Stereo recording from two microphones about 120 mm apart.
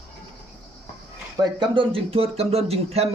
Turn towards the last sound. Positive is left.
turn(degrees=-60)  # may be behind; listen again after turning